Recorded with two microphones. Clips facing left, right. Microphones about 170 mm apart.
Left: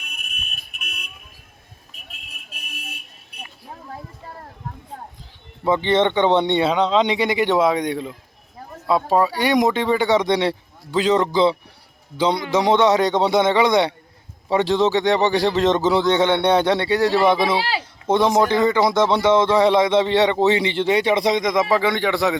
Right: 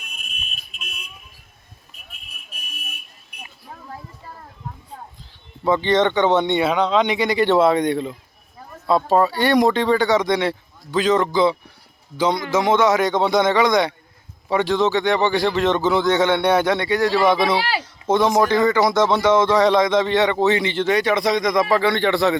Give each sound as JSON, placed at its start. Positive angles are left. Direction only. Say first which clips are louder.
{"t": 0.0, "sound": "a sound", "louder": "left 1 dB", "side_deg": 65}
{"t": 5.6, "sound": "a man's voice", "louder": "even", "side_deg": 20}
{"t": 10.9, "sound": "speech", "louder": "even", "side_deg": 20}
{"t": 11.3, "sound": "a man's voice", "louder": "even", "side_deg": 30}
{"t": 16.0, "sound": "a man's voice", "louder": "even", "side_deg": 20}
{"t": 16.4, "sound": "a man's voice", "louder": "left 1 dB", "side_deg": 30}
{"t": 18.2, "sound": "a man's voice", "louder": "even", "side_deg": 15}
{"t": 19.0, "sound": "speech", "louder": "even", "side_deg": 15}
{"t": 19.5, "sound": "a man's voice", "louder": "even", "side_deg": 25}